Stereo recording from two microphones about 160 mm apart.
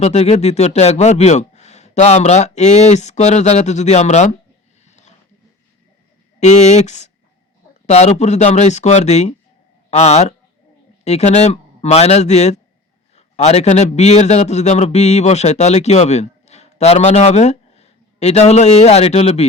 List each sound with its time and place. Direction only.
0.0 s a man's voice: 40° left (ahead or behind)
4.9 s a sound: 45° left (ahead or behind)
6.4 s a man's voice: 45° left (ahead or behind)